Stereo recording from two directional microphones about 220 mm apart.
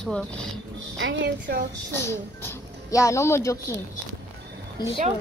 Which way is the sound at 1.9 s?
15° left (ahead or behind).